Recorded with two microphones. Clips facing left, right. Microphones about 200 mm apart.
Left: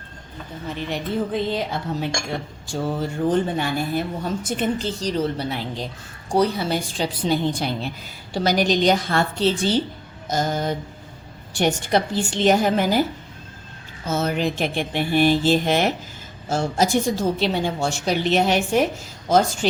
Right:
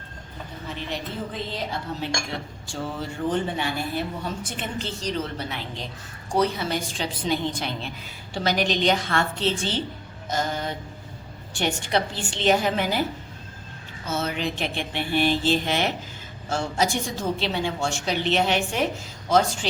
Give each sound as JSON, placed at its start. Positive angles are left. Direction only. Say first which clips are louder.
{"t": 0.9, "sound": "speech", "louder": "left 9 dB", "side_deg": 55}
{"t": 2.6, "sound": "a woman's voice", "louder": "left 7 dB", "side_deg": 40}
{"t": 14.1, "sound": "a woman's voice", "louder": "left 5 dB", "side_deg": 45}